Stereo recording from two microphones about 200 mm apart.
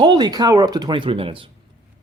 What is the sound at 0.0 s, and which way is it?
Speech, 20° right (ahead or behind).